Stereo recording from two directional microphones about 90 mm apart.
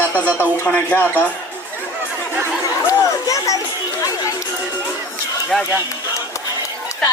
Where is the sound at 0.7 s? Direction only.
15° left (ahead or behind).